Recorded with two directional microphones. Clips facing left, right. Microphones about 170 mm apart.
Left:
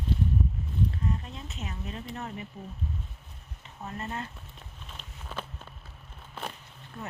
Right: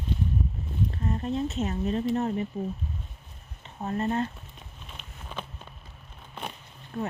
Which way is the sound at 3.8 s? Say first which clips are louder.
Right 9 dB; 35° right (ahead or behind).